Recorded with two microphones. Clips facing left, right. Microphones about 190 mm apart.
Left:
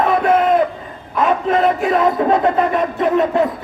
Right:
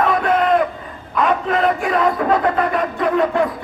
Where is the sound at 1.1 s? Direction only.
25° left (ahead or behind).